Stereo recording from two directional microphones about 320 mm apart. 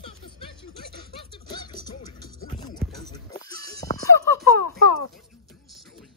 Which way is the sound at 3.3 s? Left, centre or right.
Centre.